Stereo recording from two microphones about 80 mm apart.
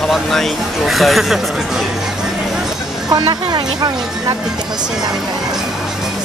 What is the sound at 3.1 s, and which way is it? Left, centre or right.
Speech, right.